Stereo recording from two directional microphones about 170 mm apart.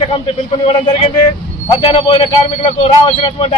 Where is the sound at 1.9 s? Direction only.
30° left (ahead or behind).